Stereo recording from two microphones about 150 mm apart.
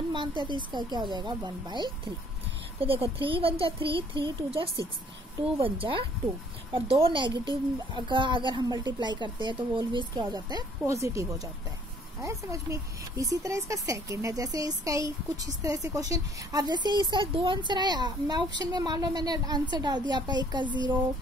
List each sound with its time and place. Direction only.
0.1 s speech: 30° right (ahead or behind)
5.6 s speech: 35° right (ahead or behind)